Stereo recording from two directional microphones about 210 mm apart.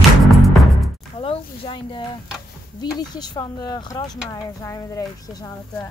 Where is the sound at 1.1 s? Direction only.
25° left (ahead or behind).